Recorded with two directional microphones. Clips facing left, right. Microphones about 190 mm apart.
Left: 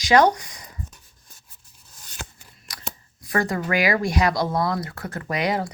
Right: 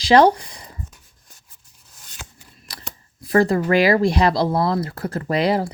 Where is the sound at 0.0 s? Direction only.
30° right (ahead or behind).